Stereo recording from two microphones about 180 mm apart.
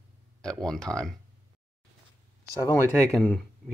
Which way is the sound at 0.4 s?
5° left (ahead or behind).